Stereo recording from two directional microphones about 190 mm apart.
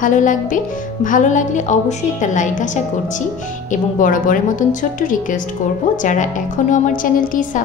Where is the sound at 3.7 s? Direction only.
45° left (ahead or behind).